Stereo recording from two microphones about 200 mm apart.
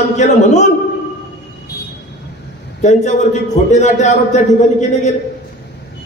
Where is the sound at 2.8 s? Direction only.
35° left (ahead or behind).